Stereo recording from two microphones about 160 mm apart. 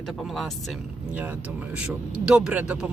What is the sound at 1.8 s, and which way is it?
A man's voice, 5° right (ahead or behind).